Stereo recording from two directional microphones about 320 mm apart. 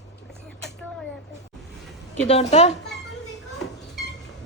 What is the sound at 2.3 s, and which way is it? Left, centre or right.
Speech, centre.